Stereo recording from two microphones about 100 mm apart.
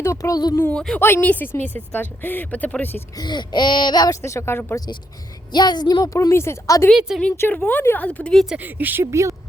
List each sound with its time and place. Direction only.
0.0 s speech: 30° left (ahead or behind)
0.7 s speech: 10° left (ahead or behind)
0.9 s speech: 20° left (ahead or behind)
3.2 s speech: 50° left (ahead or behind)
4.2 s speech: 25° left (ahead or behind)
5.5 s speech: 45° left (ahead or behind)
6.1 s speech: 25° left (ahead or behind); by 8.4 s 10° left (ahead or behind)
8.4 s speech: 15° right (ahead or behind)
9.0 s a woman's voice: 30° right (ahead or behind)